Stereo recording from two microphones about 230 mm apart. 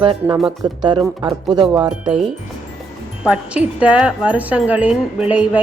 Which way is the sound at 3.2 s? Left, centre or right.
Centre.